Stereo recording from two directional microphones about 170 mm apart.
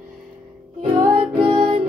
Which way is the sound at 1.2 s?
35° right (ahead or behind).